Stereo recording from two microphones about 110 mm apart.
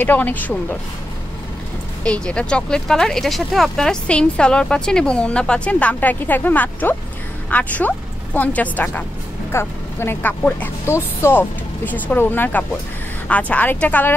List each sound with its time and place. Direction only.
0.0 s speech: 15° left (ahead or behind)
2.0 s a woman's voice: 10° left (ahead or behind)